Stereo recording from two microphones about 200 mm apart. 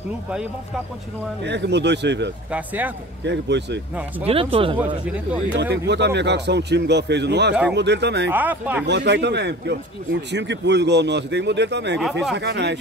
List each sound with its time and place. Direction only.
1.4 s speech: 60° right (ahead or behind)
2.5 s speech: 10° right (ahead or behind)
3.3 s speech: 60° right (ahead or behind)
4.3 s speech: 30° right (ahead or behind)
4.7 s speech: 5° right (ahead or behind)
5.6 s speech: 60° right (ahead or behind)
8.3 s speech: 10° right (ahead or behind)
8.8 s speech: 60° right (ahead or behind)
12.0 s speech: centre (ahead or behind)
12.4 s speech: 60° right (ahead or behind)